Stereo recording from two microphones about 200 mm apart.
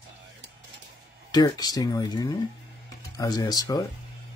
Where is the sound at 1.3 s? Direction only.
20° left (ahead or behind).